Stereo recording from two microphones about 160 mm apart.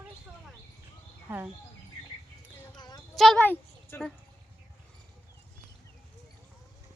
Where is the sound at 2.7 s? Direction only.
25° left (ahead or behind).